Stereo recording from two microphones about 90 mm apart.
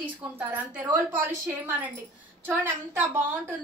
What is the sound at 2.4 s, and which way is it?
Speech, 20° right (ahead or behind).